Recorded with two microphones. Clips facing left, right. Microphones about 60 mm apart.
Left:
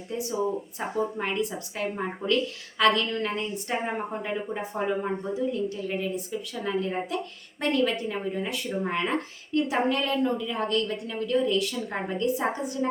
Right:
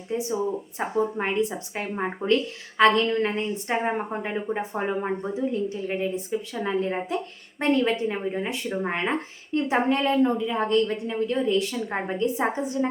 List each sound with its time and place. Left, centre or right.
0.1 s speech: right